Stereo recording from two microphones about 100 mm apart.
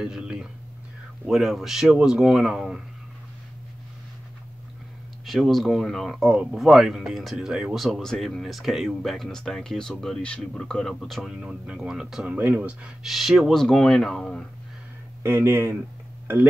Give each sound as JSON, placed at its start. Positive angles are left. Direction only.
{"t": 0.0, "sound": "speech", "side_deg": -5}
{"t": 5.2, "sound": "speech", "side_deg": 0}
{"t": 11.3, "sound": "speech", "side_deg": -10}
{"t": 13.0, "sound": "speech", "side_deg": 0}
{"t": 15.2, "sound": "speech", "side_deg": -20}